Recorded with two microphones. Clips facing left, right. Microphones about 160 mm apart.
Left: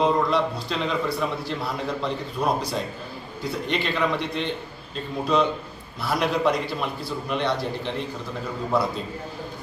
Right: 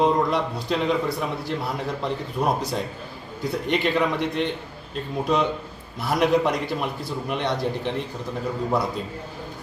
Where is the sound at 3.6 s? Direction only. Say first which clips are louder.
Right 4 dB; 15° right (ahead or behind).